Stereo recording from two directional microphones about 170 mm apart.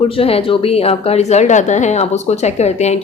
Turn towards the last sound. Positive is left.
turn(degrees=40)  # may be behind; listen again after turning